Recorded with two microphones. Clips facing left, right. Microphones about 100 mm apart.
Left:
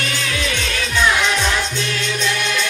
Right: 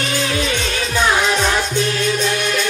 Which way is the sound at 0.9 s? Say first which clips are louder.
Right 1 dB; 35° right (ahead or behind).